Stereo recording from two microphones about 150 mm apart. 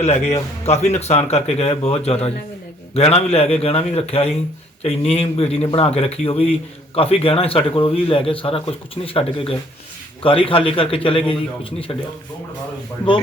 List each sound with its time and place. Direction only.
0.0 s a man's voice: 45° left (ahead or behind)